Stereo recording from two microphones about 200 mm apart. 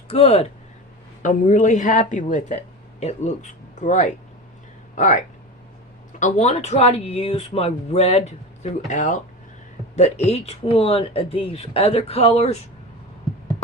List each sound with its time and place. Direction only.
0.1 s speech: 30° left (ahead or behind)